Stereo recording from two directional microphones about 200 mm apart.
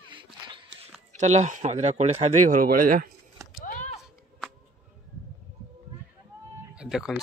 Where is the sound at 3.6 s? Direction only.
40° left (ahead or behind).